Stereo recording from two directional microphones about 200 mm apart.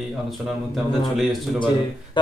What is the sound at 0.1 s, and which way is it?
A man's voice, centre (ahead or behind).